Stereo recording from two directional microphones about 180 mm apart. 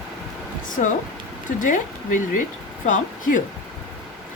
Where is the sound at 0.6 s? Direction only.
45° left (ahead or behind).